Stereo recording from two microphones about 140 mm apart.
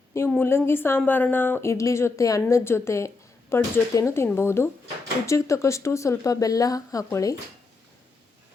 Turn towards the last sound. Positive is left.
turn(degrees=25)  # may be behind; listen again after turning